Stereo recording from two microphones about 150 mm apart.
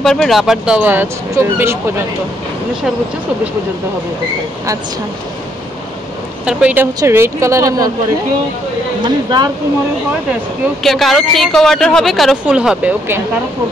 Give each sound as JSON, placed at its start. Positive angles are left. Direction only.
{"t": 0.0, "sound": "speech", "side_deg": 5}
{"t": 6.4, "sound": "speech", "side_deg": -10}
{"t": 9.0, "sound": "speech", "side_deg": -30}
{"t": 10.8, "sound": "a woman's voice", "side_deg": 0}